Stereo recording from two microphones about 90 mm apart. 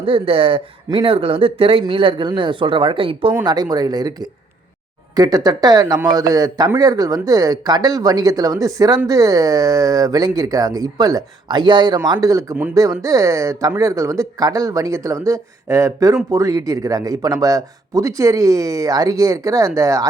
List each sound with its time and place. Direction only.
0.0 s speech: 90° right
3.4 s speech: 50° right (ahead or behind)
12.0 s speech: 45° right (ahead or behind)